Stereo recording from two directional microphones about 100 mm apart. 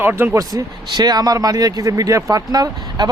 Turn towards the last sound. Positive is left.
turn(degrees=-40)  # may be behind; listen again after turning